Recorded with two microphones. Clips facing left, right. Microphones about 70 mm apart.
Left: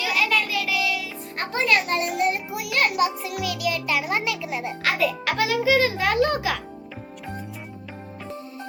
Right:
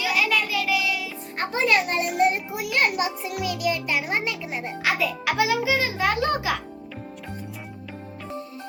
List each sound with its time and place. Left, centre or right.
0.0 s child singing: centre
1.4 s music: centre
4.8 s a child's voice: centre